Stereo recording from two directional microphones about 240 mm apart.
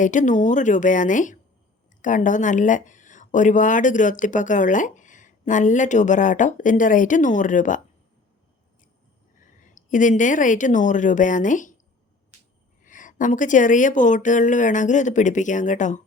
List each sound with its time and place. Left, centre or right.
0.0 s speech: left
9.7 s speech: left
12.8 s speech: left